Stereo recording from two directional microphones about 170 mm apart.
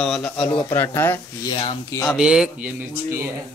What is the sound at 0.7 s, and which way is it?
Speech, 15° left (ahead or behind).